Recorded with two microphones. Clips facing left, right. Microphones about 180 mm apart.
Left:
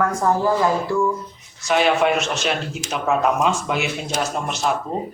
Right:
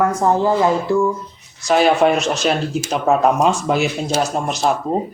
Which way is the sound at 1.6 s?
35° right (ahead or behind).